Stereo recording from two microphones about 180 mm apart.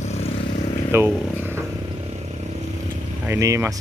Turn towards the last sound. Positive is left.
turn(degrees=-15)  # may be behind; listen again after turning